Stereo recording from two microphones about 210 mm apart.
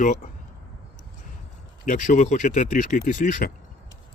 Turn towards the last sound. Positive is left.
turn(degrees=40)  # may be behind; listen again after turning